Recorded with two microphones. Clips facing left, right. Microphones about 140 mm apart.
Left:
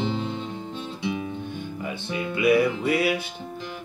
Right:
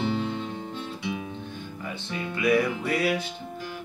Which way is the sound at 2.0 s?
10° left (ahead or behind).